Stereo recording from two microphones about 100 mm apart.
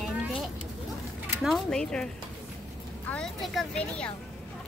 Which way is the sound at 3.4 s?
5° left (ahead or behind).